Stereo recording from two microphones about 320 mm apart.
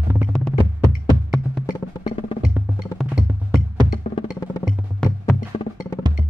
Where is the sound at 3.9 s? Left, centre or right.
Centre.